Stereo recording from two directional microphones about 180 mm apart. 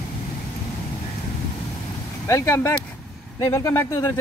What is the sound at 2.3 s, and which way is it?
Speech, 15° left (ahead or behind).